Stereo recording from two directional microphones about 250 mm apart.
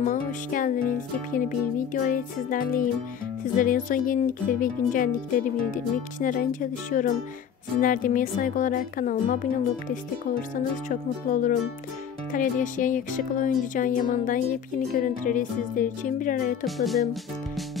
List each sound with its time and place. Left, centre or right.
0.0 s speech: left
1.9 s speech: left
16.6 s speech: centre